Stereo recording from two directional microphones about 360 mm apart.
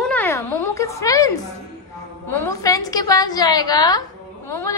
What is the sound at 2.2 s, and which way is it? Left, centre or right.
A woman's voice, centre.